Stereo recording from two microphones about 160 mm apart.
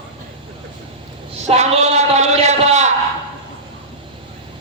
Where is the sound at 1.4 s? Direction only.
45° right (ahead or behind).